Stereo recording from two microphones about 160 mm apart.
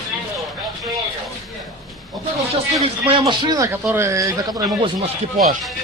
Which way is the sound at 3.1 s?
30° right (ahead or behind).